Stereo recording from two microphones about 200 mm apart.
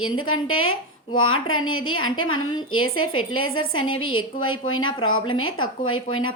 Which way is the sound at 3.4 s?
90° left.